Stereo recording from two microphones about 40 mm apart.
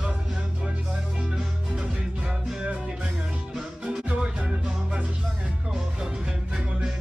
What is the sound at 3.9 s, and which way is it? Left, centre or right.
Music, right.